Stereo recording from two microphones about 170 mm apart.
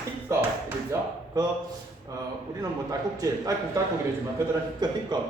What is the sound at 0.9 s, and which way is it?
Speech, 20° right (ahead or behind).